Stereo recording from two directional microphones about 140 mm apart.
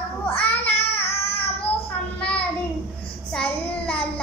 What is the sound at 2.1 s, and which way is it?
Child singing, 10° left (ahead or behind).